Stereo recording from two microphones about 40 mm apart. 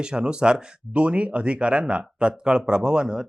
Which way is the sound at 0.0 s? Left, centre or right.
Right.